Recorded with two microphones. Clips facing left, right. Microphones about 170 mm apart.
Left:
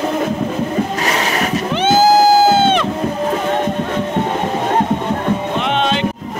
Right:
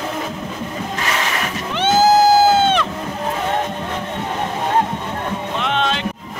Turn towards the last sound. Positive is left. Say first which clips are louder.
# left 4 dB
turn(degrees=0)  # may be behind; listen again after turning